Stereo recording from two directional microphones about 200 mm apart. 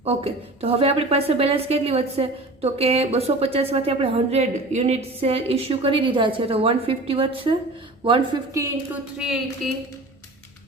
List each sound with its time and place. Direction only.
0.0 s a woman's voice: 30° right (ahead or behind)
9.1 s a woman's voice: 5° right (ahead or behind)